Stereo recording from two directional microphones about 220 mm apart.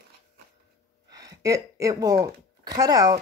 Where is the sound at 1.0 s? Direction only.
15° right (ahead or behind).